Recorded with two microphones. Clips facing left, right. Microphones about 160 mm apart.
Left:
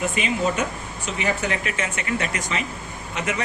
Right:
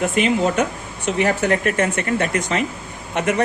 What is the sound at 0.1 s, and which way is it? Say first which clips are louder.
Speech: right 5 dB; 60° right (ahead or behind).